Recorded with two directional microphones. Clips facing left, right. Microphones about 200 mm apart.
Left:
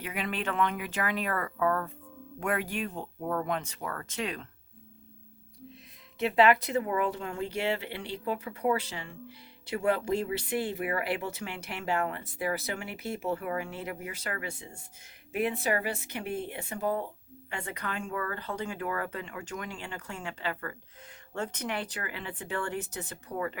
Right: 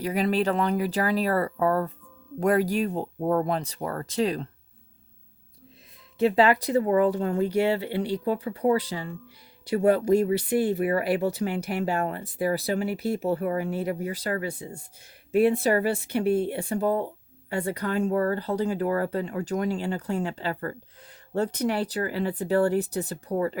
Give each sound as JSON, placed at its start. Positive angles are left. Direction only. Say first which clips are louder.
{"t": 0.0, "sound": "speech", "louder": "right 10 dB", "side_deg": -35}
{"t": 6.1, "sound": "speech", "louder": "right 3 dB", "side_deg": -35}